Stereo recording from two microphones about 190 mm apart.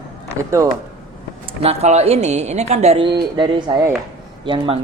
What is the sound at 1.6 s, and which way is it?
A woman's voice, 35° right (ahead or behind).